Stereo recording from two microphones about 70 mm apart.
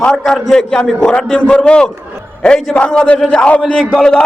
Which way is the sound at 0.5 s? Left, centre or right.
Centre.